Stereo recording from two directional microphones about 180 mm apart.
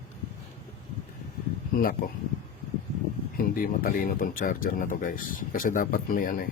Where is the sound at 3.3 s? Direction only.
50° left (ahead or behind).